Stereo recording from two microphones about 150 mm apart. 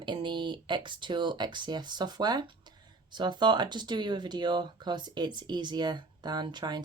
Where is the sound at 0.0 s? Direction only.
30° right (ahead or behind).